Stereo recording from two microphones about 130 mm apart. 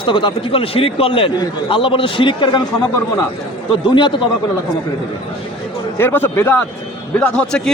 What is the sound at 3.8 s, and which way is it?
Speech, 40° left (ahead or behind).